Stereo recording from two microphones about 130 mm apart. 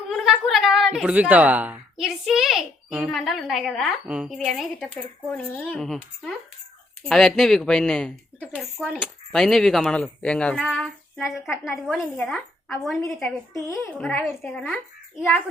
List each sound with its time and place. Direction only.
0.1 s a sound: centre (ahead or behind)
2.0 s a child's voice: 5° right (ahead or behind)
5.3 s a child's voice: 10° left (ahead or behind)
7.1 s a child's voice: centre (ahead or behind)
10.8 s a child's voice: centre (ahead or behind)
13.7 s a child's voice: 15° left (ahead or behind)